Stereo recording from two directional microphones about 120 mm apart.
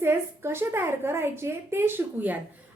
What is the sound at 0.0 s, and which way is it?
A woman's voice, 20° right (ahead or behind).